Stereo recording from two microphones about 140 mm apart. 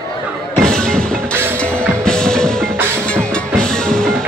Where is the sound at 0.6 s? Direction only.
5° left (ahead or behind).